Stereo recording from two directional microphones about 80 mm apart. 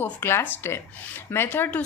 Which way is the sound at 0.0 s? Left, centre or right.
Left.